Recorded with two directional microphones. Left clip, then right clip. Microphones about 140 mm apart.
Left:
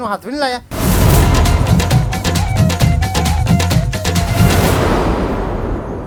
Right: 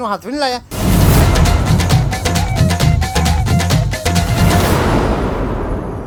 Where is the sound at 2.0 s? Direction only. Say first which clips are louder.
Right 1 dB; centre (ahead or behind).